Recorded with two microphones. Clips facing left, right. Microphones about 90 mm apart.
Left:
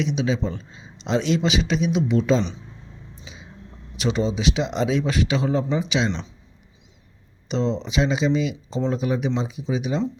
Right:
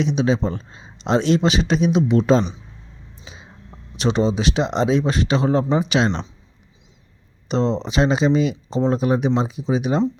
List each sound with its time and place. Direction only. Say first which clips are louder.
0.0 s speech: right 4 dB; 35° right (ahead or behind)
2.1 s speech: right 4 dB; 45° right (ahead or behind)
3.9 s speech: right 4 dB; 35° right (ahead or behind); by 6.2 s 55° right (ahead or behind)
7.4 s speech: right 3 dB; 40° right (ahead or behind)